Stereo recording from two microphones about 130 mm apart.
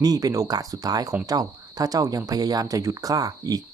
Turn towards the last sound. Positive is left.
turn(degrees=-30)  # may be behind; listen again after turning